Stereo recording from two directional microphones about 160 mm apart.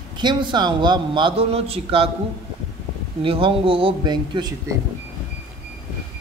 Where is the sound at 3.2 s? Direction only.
35° right (ahead or behind).